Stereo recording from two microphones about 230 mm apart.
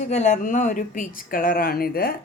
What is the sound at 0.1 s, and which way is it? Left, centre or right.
Speech, left.